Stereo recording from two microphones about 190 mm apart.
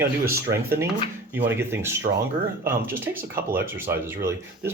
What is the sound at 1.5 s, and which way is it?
Speech, 15° right (ahead or behind).